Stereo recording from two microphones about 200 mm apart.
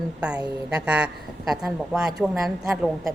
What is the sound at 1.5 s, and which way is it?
A woman's voice, centre (ahead or behind).